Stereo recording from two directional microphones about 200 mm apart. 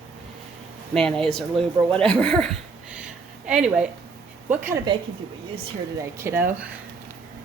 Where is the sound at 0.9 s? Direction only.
Centre (ahead or behind).